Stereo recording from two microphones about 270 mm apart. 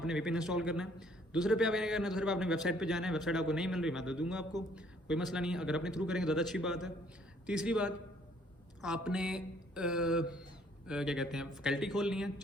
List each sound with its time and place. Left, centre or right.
0.0 s a man's voice: centre